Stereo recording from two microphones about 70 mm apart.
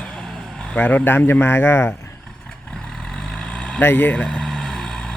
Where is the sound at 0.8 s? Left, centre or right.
Left.